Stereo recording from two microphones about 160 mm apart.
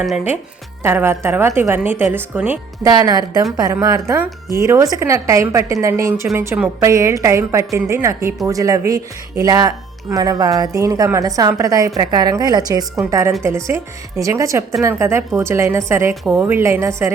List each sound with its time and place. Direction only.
0.8 s a woman's voice: 15° right (ahead or behind)
2.8 s a woman's voice: 25° right (ahead or behind)